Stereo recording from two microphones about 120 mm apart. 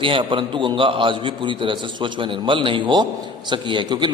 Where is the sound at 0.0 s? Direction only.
45° right (ahead or behind).